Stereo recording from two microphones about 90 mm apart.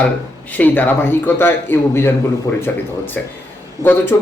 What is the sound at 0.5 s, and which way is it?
Speech, 20° left (ahead or behind).